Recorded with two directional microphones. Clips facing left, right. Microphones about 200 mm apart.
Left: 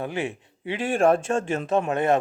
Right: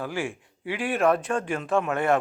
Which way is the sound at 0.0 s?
20° left (ahead or behind).